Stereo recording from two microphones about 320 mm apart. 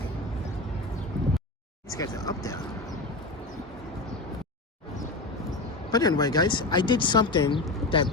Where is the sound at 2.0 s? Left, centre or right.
Centre.